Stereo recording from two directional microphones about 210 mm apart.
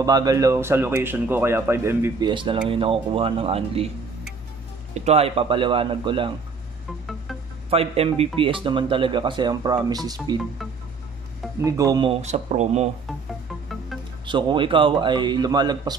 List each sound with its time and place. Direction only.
0.0 s speech: 20° right (ahead or behind)
4.9 s speech: 30° right (ahead or behind)
7.7 s speech: 30° right (ahead or behind)
11.6 s speech: 15° right (ahead or behind); by 12.9 s 30° right (ahead or behind)
14.2 s speech: 20° right (ahead or behind)